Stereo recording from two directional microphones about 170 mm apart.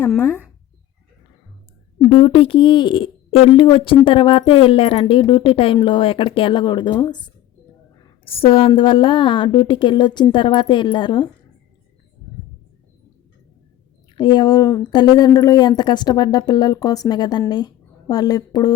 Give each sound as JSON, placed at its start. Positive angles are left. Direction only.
{"t": 2.0, "sound": "a woman's voice", "side_deg": 30}
{"t": 14.2, "sound": "a woman's voice", "side_deg": 25}